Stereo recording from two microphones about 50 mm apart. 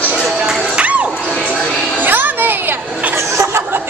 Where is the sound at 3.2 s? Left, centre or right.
Right.